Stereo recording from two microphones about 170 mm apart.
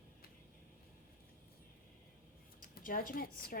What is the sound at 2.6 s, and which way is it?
Speech, 55° left (ahead or behind).